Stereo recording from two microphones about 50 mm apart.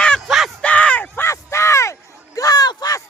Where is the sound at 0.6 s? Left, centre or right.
Left.